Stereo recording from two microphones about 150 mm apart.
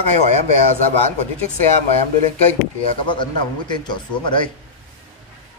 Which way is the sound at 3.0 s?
30° left (ahead or behind).